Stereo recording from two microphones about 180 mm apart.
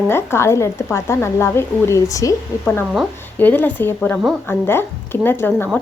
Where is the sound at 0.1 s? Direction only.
15° left (ahead or behind).